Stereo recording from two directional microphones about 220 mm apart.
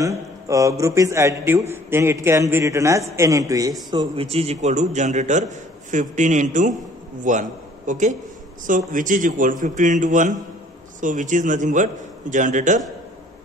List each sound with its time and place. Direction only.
0.0 s a man's voice: 15° right (ahead or behind); by 12.8 s 35° right (ahead or behind)